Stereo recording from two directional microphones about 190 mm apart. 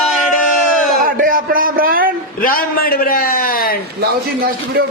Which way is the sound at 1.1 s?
45° right (ahead or behind).